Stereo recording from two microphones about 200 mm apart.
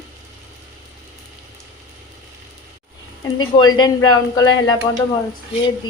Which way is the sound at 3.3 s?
20° left (ahead or behind).